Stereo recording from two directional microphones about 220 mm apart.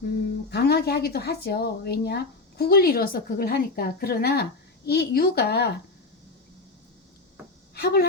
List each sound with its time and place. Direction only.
0.5 s speech: 45° left (ahead or behind)
7.8 s speech: 45° left (ahead or behind)